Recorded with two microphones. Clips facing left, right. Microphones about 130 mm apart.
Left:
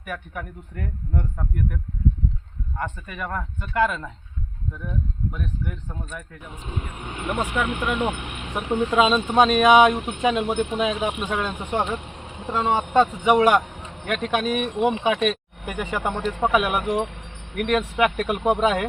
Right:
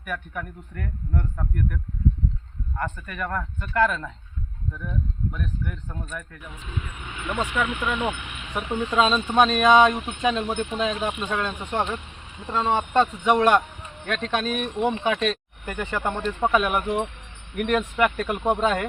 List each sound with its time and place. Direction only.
0.0 s speech: 10° left (ahead or behind)
6.5 s speech: 35° left (ahead or behind); by 8.5 s 50° left (ahead or behind)
8.5 s speech: 15° left (ahead or behind)
12.1 s vehicle: 60° left (ahead or behind)
12.5 s speech: 10° left (ahead or behind)
16.8 s wind chime: 85° left
17.6 s speech: centre (ahead or behind)